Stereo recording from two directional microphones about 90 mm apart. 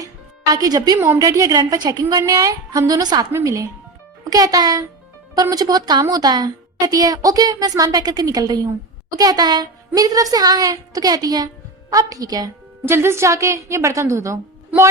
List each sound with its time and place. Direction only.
0.0 s music: 45° right (ahead or behind)
0.9 s a woman's voice: 25° right (ahead or behind)
1.2 s a woman's voice: 40° right (ahead or behind)
3.3 s a woman's voice: 35° right (ahead or behind)
12.8 s a woman's voice: 25° right (ahead or behind)